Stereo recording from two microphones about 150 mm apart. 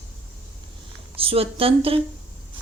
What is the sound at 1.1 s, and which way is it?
Speech, 40° right (ahead or behind).